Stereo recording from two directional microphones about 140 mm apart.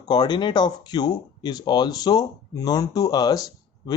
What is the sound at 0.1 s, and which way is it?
Speech, 30° left (ahead or behind).